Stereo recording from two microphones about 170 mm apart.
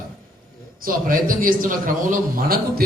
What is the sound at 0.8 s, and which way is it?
A man's voice, 55° right (ahead or behind).